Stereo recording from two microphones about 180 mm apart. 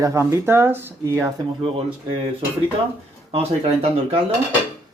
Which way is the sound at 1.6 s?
30° right (ahead or behind).